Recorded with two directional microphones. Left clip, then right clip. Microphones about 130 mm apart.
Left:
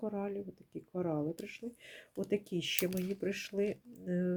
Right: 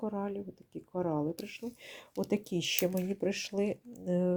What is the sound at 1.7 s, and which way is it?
Speech, 30° right (ahead or behind).